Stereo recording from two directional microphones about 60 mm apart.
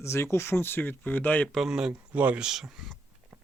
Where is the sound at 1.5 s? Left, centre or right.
Centre.